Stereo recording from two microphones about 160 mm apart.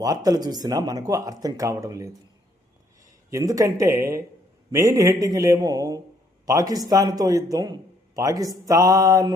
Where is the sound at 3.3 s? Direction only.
20° right (ahead or behind).